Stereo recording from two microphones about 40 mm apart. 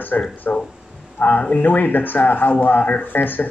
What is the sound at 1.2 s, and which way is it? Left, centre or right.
Speech, left.